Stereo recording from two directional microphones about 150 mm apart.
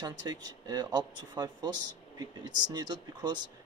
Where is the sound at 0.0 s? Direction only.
25° right (ahead or behind).